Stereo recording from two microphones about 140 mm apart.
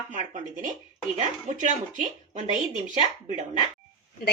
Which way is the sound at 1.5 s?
60° right (ahead or behind).